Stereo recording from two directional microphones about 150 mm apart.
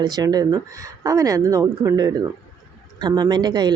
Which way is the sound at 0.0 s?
25° right (ahead or behind).